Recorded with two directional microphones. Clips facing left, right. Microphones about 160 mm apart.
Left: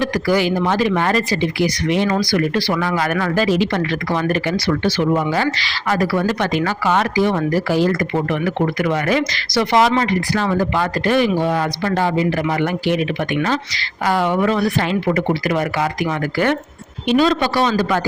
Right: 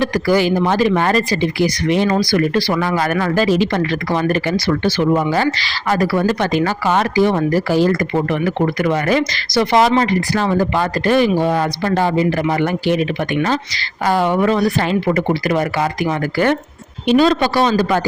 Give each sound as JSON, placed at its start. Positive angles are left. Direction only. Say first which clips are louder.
{"t": 0.1, "sound": "speech", "louder": "right 2 dB", "side_deg": -35}